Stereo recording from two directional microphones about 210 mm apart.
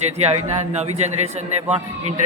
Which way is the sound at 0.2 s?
30° right (ahead or behind).